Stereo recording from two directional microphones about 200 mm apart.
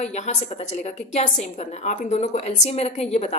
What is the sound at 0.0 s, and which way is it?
A woman's voice, 35° left (ahead or behind).